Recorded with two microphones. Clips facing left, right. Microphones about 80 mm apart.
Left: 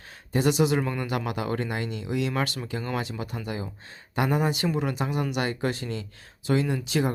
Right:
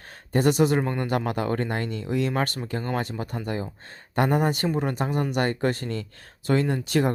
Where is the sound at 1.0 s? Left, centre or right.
Right.